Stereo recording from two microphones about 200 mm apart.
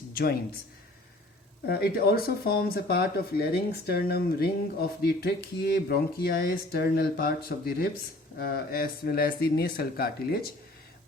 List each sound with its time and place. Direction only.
1.6 s speech: 50° left (ahead or behind)